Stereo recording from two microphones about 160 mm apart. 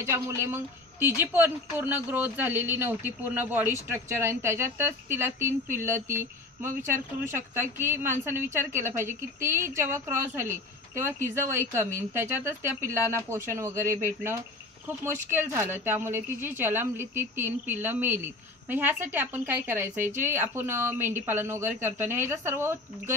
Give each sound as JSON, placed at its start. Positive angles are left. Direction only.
{"t": 0.0, "sound": "a woman's voice", "side_deg": -15}